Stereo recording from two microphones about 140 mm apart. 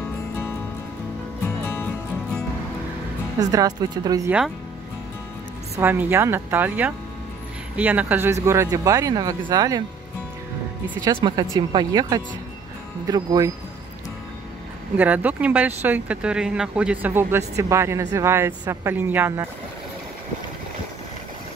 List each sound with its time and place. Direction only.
1.7 s music: 15° left (ahead or behind)
3.3 s speech: 25° right (ahead or behind)
5.8 s speech: 15° right (ahead or behind)
11.1 s speech: 35° right (ahead or behind)
15.0 s speech: 10° right (ahead or behind)